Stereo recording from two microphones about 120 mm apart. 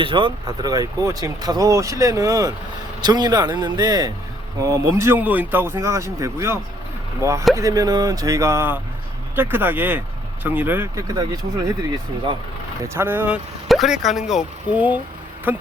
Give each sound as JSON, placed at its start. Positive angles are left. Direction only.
{"t": 0.0, "sound": "speech", "side_deg": -45}
{"t": 11.1, "sound": "speech", "side_deg": -30}
{"t": 12.8, "sound": "speech", "side_deg": -20}
{"t": 13.7, "sound": "speech", "side_deg": 0}